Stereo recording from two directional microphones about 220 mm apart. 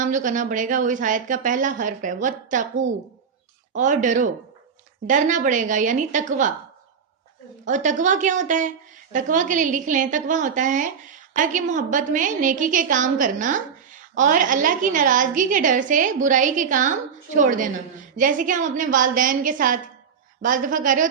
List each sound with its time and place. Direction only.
0.0 s a woman's voice: 35° right (ahead or behind)
3.8 s a woman's voice: 35° right (ahead or behind)
7.6 s a woman's voice: 35° right (ahead or behind)